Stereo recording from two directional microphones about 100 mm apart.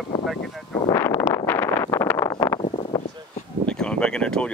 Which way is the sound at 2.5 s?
65° left (ahead or behind).